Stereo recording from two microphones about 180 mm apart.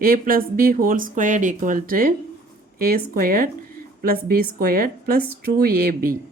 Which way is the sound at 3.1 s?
55° right (ahead or behind).